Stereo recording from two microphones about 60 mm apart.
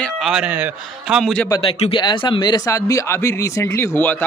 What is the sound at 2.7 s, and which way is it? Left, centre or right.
Speech, left.